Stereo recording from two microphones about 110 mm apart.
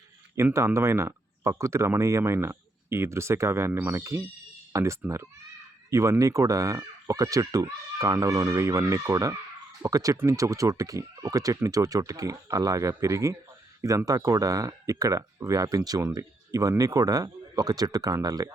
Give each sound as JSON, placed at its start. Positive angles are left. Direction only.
{"t": 0.5, "sound": "speech", "side_deg": -25}